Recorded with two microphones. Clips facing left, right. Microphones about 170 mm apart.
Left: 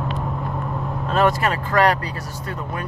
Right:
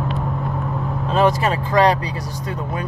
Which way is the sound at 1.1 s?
Centre (ahead or behind).